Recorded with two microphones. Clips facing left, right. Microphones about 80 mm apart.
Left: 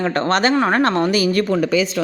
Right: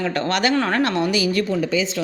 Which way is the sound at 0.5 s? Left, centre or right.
Left.